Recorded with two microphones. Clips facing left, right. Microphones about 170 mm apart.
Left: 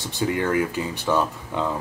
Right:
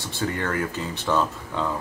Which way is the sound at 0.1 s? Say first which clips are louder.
Left 4 dB; 15° left (ahead or behind).